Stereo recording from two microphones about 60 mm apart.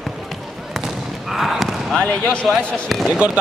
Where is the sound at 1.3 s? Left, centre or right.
Centre.